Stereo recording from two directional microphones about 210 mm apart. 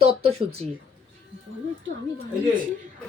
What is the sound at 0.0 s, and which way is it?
Speech, 30° right (ahead or behind).